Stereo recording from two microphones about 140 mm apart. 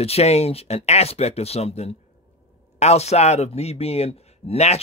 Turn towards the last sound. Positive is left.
turn(degrees=50)  # may be behind; listen again after turning